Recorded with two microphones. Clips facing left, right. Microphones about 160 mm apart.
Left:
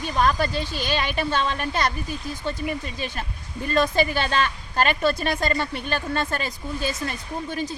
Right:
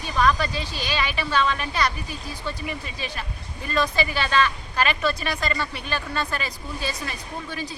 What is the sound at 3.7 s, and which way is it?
A woman's voice, 50° left (ahead or behind).